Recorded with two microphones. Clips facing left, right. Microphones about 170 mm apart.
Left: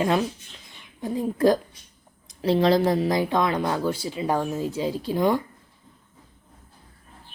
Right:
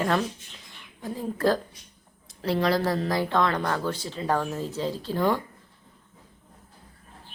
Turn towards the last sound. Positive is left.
turn(degrees=15)  # may be behind; listen again after turning